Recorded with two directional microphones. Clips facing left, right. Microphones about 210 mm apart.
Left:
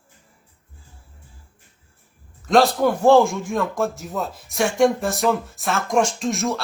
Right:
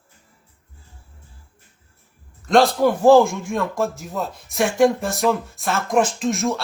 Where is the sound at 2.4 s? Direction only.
Centre (ahead or behind).